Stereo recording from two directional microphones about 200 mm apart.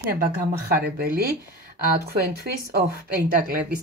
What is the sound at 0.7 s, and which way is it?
Speech, 50° right (ahead or behind).